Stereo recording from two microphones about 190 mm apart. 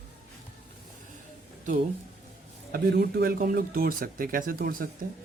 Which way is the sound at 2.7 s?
55° right (ahead or behind).